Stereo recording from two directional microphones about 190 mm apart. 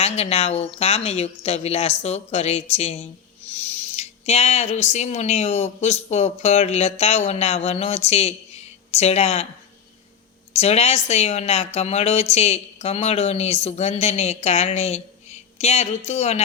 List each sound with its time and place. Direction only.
0.0 s speech: 35° left (ahead or behind)
10.5 s speech: 35° left (ahead or behind)